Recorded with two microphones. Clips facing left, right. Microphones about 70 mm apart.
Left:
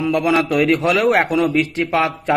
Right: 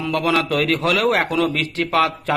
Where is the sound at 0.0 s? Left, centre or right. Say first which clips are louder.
Left 3 dB; left.